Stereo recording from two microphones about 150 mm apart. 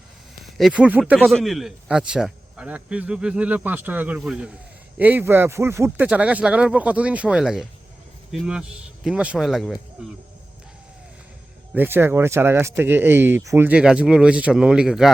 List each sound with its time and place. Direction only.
0.4 s speech: 5° right (ahead or behind)
1.2 s speech: centre (ahead or behind)
11.7 s speech: 15° right (ahead or behind)